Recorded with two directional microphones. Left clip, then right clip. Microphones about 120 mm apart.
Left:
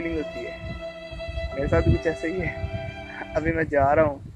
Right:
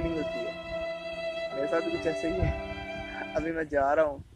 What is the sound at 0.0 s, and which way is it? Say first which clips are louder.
Music: left 2 dB; centre (ahead or behind).